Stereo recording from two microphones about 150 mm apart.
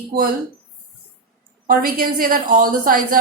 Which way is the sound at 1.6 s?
70° right (ahead or behind).